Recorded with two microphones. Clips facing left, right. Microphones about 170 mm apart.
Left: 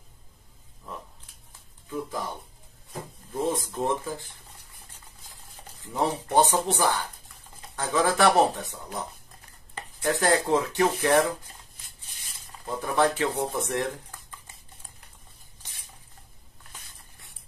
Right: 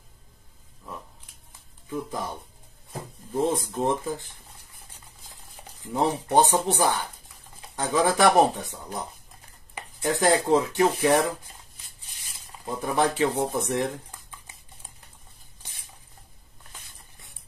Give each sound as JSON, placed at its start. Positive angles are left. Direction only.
{"t": 3.3, "sound": "speech", "side_deg": -20}
{"t": 5.8, "sound": "speech", "side_deg": -15}
{"t": 12.6, "sound": "speech", "side_deg": -15}